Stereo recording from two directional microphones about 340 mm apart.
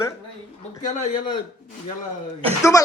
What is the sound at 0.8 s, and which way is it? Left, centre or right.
Speech, left.